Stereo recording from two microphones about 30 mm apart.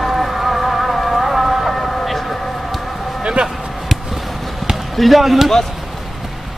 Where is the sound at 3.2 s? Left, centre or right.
Right.